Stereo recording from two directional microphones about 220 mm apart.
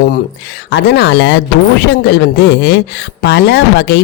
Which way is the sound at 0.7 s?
50° left (ahead or behind).